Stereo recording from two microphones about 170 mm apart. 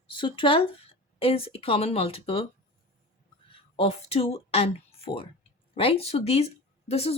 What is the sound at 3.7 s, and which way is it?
Speech, 35° left (ahead or behind).